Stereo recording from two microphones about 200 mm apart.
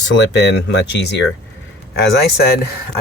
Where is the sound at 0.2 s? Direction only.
60° left (ahead or behind).